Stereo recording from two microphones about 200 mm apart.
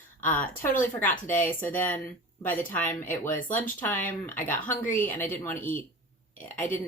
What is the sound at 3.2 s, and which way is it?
Speech, 40° left (ahead or behind).